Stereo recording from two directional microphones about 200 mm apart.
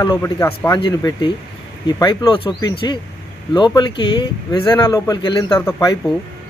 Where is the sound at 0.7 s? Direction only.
25° left (ahead or behind).